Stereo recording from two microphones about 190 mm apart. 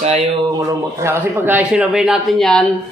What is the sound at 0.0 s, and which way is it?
Speech, 30° right (ahead or behind).